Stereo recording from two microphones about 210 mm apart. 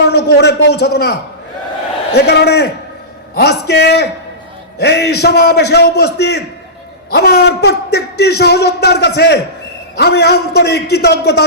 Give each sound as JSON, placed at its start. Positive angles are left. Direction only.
{"t": 0.1, "sound": "a man's voice", "side_deg": 50}